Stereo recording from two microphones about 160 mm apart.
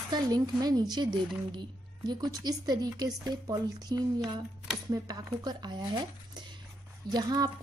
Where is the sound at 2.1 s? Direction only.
25° right (ahead or behind).